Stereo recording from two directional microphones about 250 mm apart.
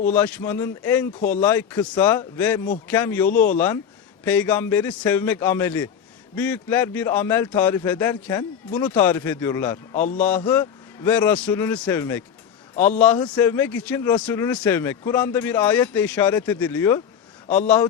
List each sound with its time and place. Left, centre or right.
0.1 s a man's voice: centre